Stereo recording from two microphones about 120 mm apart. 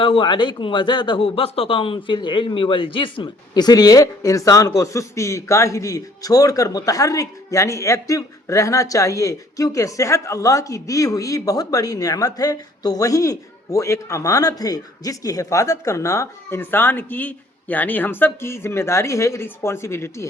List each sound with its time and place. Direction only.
0.0 s a man's voice: 45° left (ahead or behind); by 20.2 s 20° left (ahead or behind)